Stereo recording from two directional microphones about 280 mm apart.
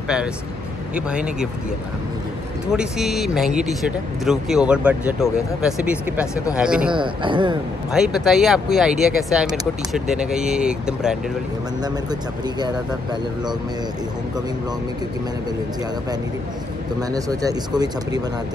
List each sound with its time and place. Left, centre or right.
0.9 s speech: centre
2.7 s speech: centre
6.9 s speech: centre
7.9 s speech: centre
11.8 s speech: centre
17.1 s speech: centre